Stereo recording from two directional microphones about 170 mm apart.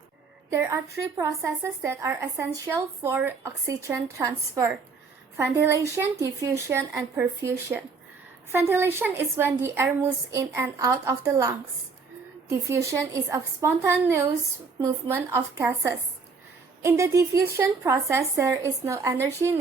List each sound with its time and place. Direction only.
0.5 s a woman's voice: 15° right (ahead or behind)
8.5 s a woman's voice: 15° right (ahead or behind)